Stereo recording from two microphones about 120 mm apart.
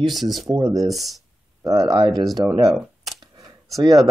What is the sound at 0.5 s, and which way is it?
Speech, 25° right (ahead or behind).